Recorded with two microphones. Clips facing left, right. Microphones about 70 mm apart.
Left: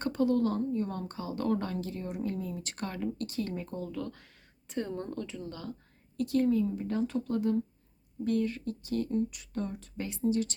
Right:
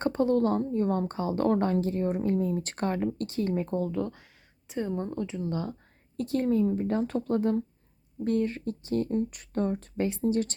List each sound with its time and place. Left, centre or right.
0.0 s a woman's voice: right
4.7 s a woman's voice: centre; by 10.5 s right